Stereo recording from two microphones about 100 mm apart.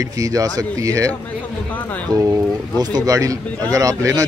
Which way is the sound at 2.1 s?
35° right (ahead or behind).